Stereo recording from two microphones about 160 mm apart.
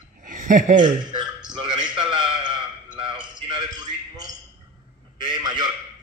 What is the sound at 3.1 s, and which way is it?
Speech, 30° right (ahead or behind).